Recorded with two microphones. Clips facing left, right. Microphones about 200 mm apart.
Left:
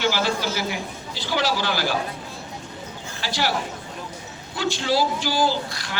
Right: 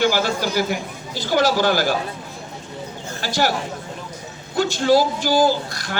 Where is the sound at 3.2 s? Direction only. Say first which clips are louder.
Right 5 dB; 45° right (ahead or behind).